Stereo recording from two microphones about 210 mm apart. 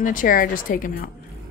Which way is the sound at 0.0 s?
40° left (ahead or behind).